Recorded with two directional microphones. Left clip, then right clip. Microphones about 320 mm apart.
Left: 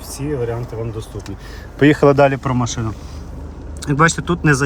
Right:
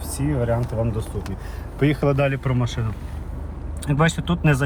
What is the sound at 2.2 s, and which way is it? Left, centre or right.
Speech, centre.